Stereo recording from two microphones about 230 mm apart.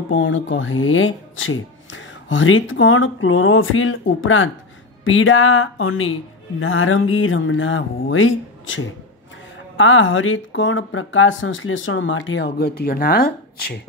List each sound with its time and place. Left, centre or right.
0.1 s speech: left